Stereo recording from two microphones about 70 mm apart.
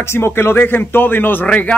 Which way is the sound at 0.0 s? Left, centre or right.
Left.